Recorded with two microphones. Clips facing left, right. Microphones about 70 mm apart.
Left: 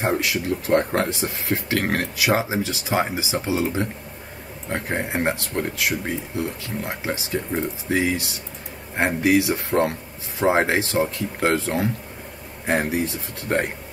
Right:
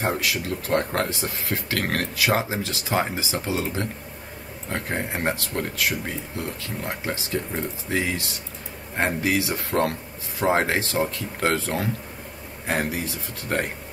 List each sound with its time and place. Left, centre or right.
0.0 s speech: left
13.0 s speech: left